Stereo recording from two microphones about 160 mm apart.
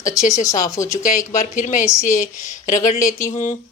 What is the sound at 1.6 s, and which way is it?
A woman's voice, 50° left (ahead or behind).